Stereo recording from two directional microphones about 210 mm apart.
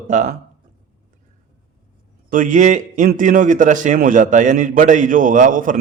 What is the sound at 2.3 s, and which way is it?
A man's voice, 40° right (ahead or behind).